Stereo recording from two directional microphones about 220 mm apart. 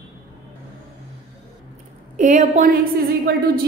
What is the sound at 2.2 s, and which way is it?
A woman's voice, 35° right (ahead or behind).